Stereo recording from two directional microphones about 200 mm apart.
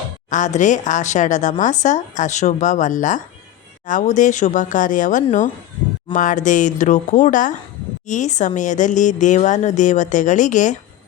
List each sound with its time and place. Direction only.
0.3 s speech: 35° left (ahead or behind)